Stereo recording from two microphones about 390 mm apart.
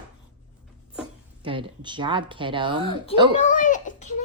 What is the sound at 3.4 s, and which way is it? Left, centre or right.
Speech, centre.